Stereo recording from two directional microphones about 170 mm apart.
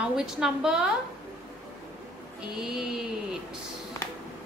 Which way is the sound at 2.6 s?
5° right (ahead or behind).